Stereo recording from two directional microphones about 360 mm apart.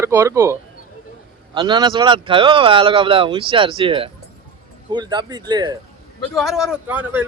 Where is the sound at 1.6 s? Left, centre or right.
Centre.